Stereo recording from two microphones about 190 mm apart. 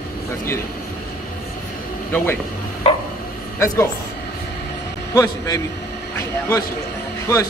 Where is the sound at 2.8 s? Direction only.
30° left (ahead or behind).